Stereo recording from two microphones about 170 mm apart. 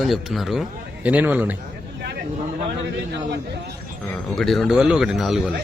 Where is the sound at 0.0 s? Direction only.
Centre (ahead or behind).